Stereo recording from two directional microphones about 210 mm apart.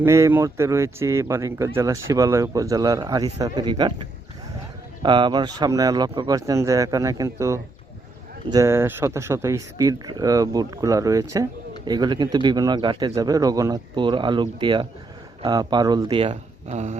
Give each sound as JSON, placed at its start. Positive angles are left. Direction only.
{"t": 0.0, "sound": "speech", "side_deg": -10}
{"t": 5.0, "sound": "speech", "side_deg": -20}